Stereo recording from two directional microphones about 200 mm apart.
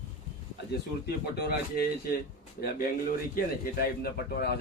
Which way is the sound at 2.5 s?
45° left (ahead or behind).